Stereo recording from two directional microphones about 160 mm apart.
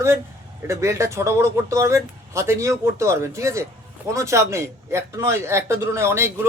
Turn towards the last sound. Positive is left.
turn(degrees=-15)  # may be behind; listen again after turning